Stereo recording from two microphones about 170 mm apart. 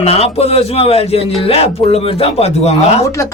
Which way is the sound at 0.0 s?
35° left (ahead or behind).